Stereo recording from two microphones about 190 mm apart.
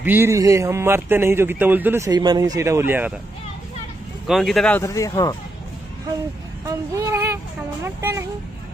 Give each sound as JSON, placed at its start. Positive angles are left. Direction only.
{"t": 0.0, "sound": "speech", "side_deg": -10}
{"t": 4.3, "sound": "speech", "side_deg": 0}
{"t": 6.6, "sound": "speech", "side_deg": -15}